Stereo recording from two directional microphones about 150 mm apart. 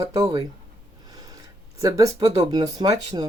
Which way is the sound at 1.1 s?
25° right (ahead or behind).